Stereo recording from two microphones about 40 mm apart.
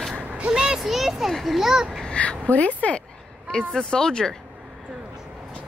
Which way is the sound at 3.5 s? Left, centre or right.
Centre.